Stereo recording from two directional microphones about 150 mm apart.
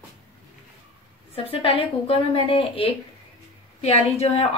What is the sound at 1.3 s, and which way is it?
A woman's voice, 40° left (ahead or behind).